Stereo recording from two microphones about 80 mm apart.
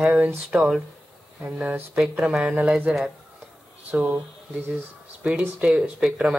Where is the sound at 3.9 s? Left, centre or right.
Centre.